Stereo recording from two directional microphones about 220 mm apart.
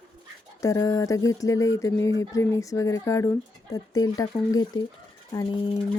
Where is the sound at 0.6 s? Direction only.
15° left (ahead or behind).